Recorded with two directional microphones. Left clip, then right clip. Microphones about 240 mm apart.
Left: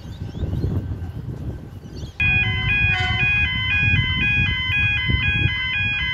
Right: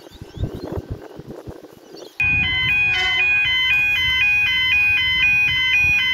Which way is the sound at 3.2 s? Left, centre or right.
Right.